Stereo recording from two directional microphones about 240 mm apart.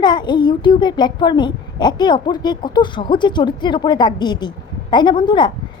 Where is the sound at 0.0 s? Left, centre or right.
Centre.